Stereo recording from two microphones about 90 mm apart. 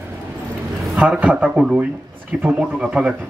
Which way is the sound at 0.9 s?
10° right (ahead or behind).